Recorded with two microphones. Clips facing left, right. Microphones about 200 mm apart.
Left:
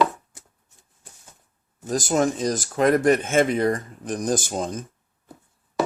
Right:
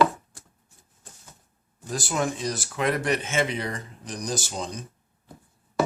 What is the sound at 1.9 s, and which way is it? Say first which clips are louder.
Speech: left 6 dB; 45° left (ahead or behind).